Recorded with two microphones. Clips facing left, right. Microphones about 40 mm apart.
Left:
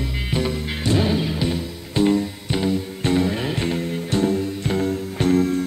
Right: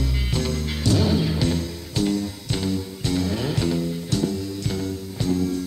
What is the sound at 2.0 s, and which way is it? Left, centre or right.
Music, left.